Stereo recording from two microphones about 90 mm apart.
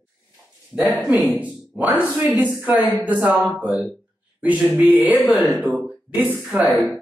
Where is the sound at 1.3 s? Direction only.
20° right (ahead or behind).